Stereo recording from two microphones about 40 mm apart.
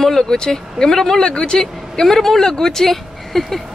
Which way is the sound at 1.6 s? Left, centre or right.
Centre.